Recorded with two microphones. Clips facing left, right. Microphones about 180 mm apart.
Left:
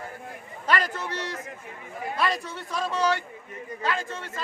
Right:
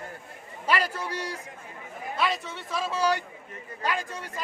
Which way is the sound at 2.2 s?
Centre (ahead or behind).